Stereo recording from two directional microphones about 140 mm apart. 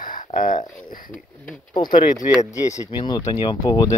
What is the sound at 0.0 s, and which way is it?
Speech, 70° left (ahead or behind).